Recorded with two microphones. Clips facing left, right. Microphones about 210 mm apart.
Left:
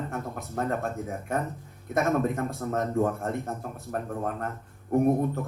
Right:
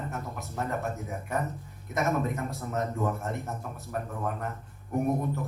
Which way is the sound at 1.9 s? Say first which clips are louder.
Left 3 dB; 55° left (ahead or behind).